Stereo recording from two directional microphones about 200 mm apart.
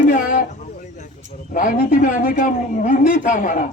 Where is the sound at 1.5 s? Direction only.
40° left (ahead or behind).